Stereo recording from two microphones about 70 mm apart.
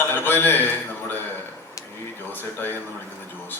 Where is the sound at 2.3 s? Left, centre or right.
Left.